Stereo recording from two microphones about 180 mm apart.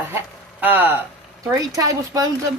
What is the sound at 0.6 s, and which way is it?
Speech, 10° right (ahead or behind).